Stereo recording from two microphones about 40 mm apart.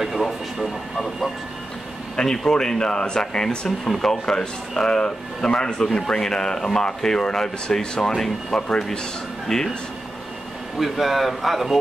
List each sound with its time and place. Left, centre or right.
0.0 s a sound: centre
2.1 s a man's voice: centre
10.8 s speech: centre